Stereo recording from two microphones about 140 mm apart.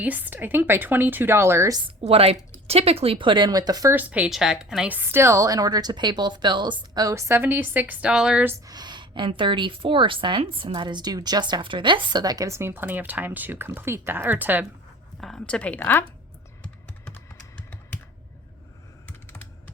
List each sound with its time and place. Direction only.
0.0 s a woman's voice: 10° right (ahead or behind)
2.0 s a woman's voice: 45° right (ahead or behind); by 3.9 s 25° right (ahead or behind)
3.9 s a woman's voice: 10° right (ahead or behind)
8.4 s a woman's voice: 25° right (ahead or behind)
15.2 s a woman's voice: 5° left (ahead or behind)
19.0 s computer keyboard: 10° left (ahead or behind)